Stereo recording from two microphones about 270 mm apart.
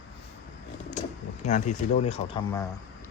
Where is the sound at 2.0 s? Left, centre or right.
Left.